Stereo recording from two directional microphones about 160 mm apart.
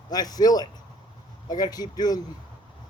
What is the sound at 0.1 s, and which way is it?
Speech, 25° left (ahead or behind).